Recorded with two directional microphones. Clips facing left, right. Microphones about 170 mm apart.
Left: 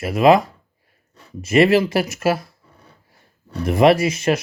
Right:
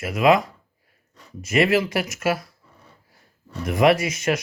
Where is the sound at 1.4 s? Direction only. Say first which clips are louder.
Left 5 dB; 30° left (ahead or behind).